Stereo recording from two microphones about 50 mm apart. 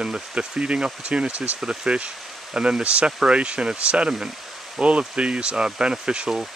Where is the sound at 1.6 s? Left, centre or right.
Centre.